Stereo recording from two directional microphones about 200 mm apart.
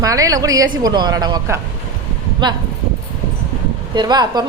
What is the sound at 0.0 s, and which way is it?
A woman's voice, 15° right (ahead or behind).